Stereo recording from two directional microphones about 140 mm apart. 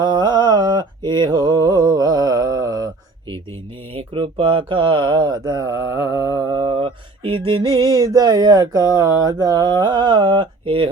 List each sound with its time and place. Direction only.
0.0 s mantra: 30° right (ahead or behind)
3.9 s speech: 40° right (ahead or behind)